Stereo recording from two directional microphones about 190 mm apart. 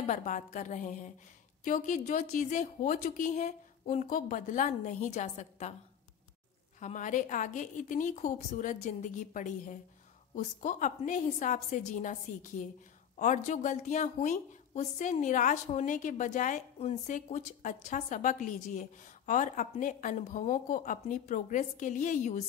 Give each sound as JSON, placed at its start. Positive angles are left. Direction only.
{"t": 0.0, "sound": "a woman's voice", "side_deg": 40}
{"t": 6.8, "sound": "a woman's voice", "side_deg": 40}